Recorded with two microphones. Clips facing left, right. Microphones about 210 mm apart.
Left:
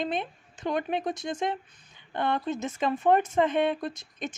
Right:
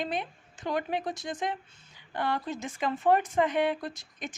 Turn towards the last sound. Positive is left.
turn(degrees=20)  # may be behind; listen again after turning